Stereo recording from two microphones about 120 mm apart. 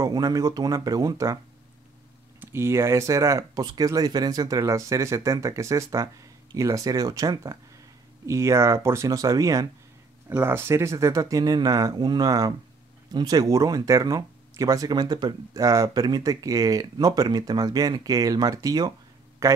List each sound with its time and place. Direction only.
0.0 s speech: 35° right (ahead or behind)
2.4 s speech: 20° right (ahead or behind)